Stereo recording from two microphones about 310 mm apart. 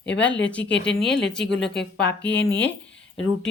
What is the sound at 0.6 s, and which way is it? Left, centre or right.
A woman's voice, left.